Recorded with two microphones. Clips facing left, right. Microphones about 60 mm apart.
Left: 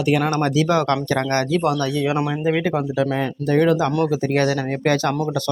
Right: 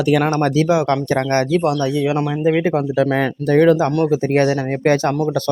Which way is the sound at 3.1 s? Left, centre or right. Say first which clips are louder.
Right 4 dB; right.